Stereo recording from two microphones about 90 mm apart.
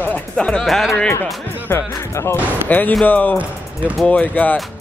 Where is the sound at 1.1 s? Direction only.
25° left (ahead or behind).